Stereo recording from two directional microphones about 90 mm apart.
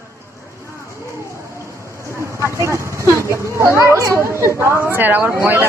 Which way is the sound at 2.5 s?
30° right (ahead or behind).